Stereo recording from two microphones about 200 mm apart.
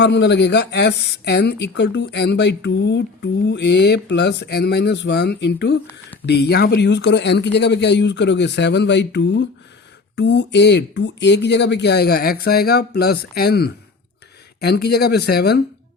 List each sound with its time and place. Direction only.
0.0 s speech: 60° left (ahead or behind)